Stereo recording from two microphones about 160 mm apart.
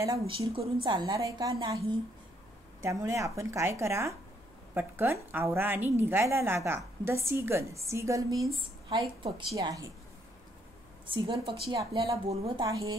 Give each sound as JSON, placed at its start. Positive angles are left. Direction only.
{"t": 0.0, "sound": "a woman's voice", "side_deg": -20}
{"t": 0.3, "sound": "a woman's voice", "side_deg": -40}
{"t": 0.8, "sound": "a woman's voice", "side_deg": -25}
{"t": 11.2, "sound": "a woman's voice", "side_deg": -30}